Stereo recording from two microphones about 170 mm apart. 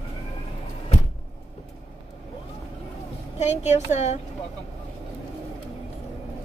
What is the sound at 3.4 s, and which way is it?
Speech, 40° left (ahead or behind).